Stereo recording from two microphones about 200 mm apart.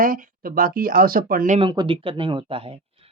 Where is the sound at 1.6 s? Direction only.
25° right (ahead or behind).